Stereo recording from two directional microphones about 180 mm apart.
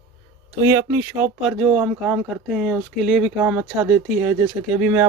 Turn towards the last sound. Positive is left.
turn(degrees=-10)  # may be behind; listen again after turning